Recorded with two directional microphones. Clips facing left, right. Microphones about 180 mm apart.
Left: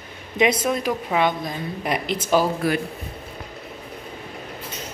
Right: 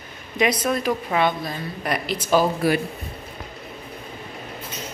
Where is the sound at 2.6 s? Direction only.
5° right (ahead or behind).